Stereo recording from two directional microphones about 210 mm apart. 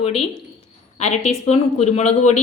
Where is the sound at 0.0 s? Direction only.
30° left (ahead or behind).